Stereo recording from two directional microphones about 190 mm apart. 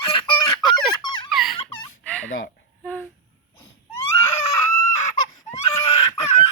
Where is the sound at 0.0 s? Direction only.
25° left (ahead or behind).